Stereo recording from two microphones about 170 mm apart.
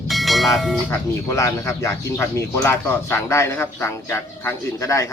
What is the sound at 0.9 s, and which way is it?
Speech, 15° left (ahead or behind).